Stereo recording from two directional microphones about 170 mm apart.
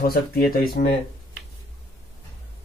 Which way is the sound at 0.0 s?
60° left (ahead or behind).